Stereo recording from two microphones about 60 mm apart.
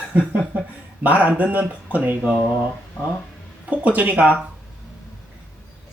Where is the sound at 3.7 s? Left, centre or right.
Right.